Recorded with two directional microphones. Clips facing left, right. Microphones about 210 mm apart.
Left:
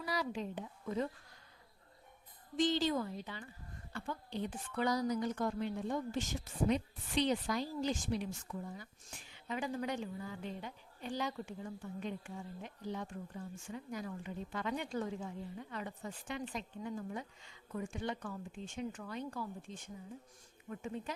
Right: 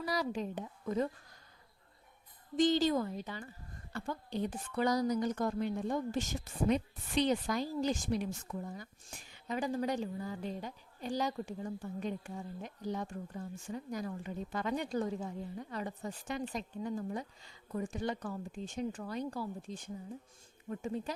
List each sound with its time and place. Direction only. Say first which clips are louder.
0.0 s speech: right 3 dB; 40° right (ahead or behind)
2.6 s a woman's voice: right 4 dB; 40° right (ahead or behind)